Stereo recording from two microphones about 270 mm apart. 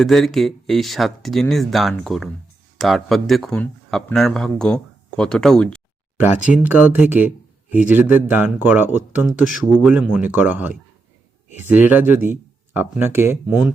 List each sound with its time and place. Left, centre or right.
0.0 s speech: centre
11.4 s a sound: left
11.7 s speech: centre